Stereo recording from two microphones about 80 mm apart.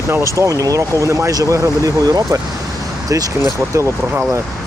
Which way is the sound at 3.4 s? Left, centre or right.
Right.